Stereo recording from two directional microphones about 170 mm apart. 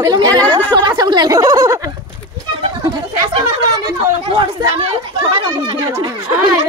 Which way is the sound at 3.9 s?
25° right (ahead or behind).